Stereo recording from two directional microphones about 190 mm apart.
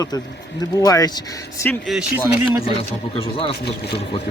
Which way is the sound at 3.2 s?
30° left (ahead or behind).